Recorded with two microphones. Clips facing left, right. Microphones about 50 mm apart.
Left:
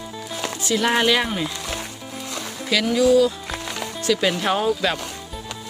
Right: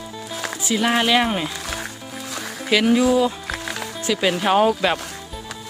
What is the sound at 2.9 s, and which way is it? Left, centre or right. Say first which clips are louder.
Speech: left 4 dB; right.